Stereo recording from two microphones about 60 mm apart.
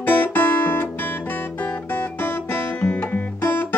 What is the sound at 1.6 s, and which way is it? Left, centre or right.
Guitar, left.